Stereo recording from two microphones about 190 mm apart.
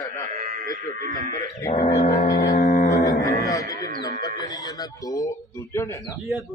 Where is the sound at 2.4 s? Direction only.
45° left (ahead or behind).